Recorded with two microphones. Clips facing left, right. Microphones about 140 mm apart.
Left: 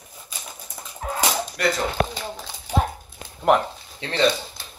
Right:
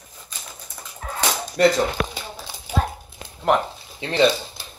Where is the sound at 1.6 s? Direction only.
30° right (ahead or behind).